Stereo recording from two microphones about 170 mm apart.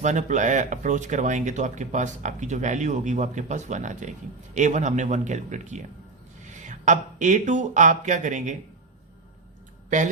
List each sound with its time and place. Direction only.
0.0 s speech: 45° right (ahead or behind)